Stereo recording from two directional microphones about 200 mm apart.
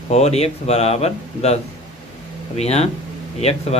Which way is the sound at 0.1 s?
35° left (ahead or behind).